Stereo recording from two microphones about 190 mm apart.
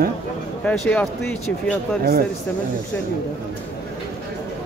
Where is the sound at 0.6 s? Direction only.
5° left (ahead or behind).